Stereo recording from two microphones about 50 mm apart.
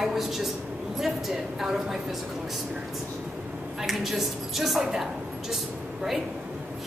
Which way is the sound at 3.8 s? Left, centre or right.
Centre.